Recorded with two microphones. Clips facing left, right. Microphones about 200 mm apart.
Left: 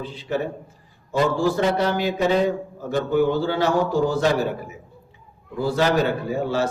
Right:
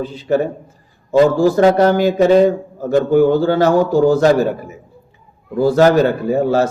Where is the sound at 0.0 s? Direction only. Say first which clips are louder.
Right 9 dB; 45° right (ahead or behind).